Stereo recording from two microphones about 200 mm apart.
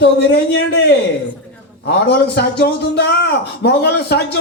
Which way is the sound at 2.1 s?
55° left (ahead or behind).